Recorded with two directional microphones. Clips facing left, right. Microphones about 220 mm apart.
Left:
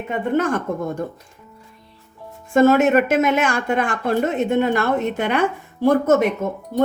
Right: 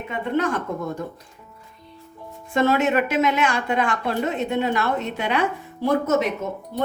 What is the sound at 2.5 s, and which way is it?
A woman's voice, 45° left (ahead or behind).